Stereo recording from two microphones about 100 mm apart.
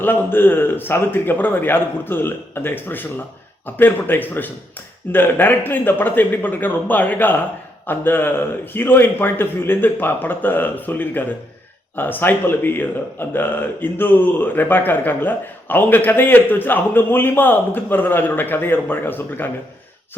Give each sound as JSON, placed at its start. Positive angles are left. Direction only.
{"t": 0.0, "sound": "a man's voice", "side_deg": 20}